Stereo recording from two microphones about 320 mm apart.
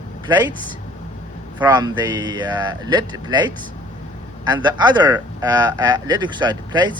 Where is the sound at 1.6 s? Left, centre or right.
Centre.